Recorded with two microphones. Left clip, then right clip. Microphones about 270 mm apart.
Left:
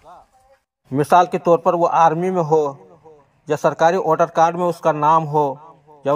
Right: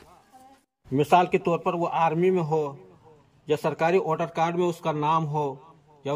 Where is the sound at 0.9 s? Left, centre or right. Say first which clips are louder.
Left 6 dB; left.